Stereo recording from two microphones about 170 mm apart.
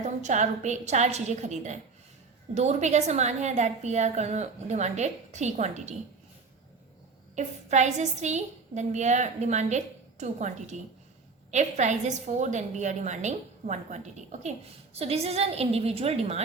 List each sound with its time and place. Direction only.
0.0 s a woman's voice: 45° right (ahead or behind)
7.3 s a woman's voice: 45° right (ahead or behind)